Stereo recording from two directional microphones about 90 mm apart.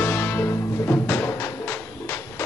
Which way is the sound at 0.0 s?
25° left (ahead or behind).